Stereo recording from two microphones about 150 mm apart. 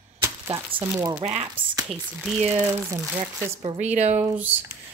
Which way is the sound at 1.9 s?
Centre (ahead or behind).